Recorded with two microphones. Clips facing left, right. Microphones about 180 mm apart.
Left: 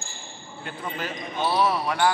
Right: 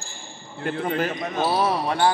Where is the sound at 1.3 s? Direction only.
40° right (ahead or behind).